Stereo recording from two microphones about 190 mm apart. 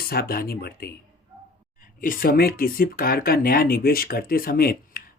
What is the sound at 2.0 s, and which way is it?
Speech, 50° left (ahead or behind).